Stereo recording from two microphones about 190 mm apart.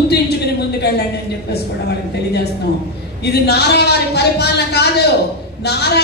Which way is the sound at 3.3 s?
60° left (ahead or behind).